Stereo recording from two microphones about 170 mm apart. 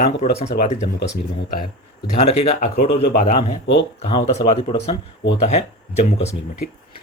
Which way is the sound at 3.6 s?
90° left.